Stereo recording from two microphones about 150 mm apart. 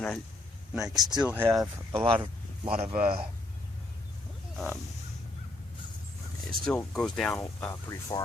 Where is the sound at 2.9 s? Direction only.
75° right (ahead or behind).